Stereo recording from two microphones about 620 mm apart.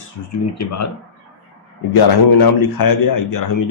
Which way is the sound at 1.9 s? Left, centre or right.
Left.